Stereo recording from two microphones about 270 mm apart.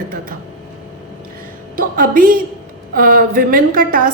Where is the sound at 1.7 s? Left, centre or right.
Right.